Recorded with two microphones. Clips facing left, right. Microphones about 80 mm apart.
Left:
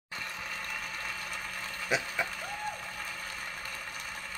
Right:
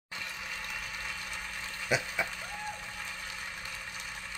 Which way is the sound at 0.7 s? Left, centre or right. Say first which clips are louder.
Left 2 dB; left.